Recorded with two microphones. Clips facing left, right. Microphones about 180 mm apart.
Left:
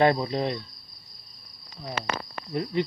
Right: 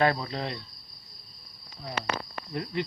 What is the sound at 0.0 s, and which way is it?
Cricket, 20° left (ahead or behind).